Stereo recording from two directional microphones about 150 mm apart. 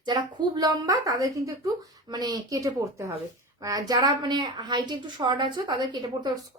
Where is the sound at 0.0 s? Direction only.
30° right (ahead or behind).